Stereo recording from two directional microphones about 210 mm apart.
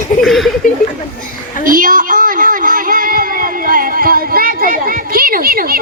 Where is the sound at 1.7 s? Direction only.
40° right (ahead or behind).